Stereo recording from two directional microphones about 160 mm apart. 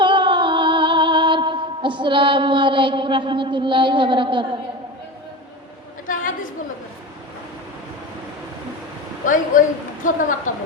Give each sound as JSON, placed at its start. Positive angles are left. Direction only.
{"t": 0.0, "sound": "music", "side_deg": -30}
{"t": 6.1, "sound": "chatter", "side_deg": 55}
{"t": 9.2, "sound": "speech", "side_deg": 55}